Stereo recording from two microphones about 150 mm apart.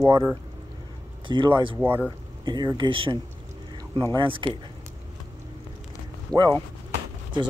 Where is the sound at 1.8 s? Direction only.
10° right (ahead or behind).